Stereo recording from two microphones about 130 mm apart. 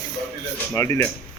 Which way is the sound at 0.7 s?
20° left (ahead or behind).